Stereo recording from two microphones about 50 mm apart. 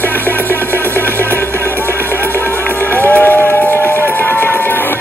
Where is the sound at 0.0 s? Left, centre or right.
Left.